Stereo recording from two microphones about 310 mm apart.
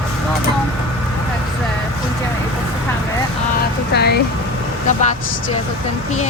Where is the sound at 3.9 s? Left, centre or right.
Left.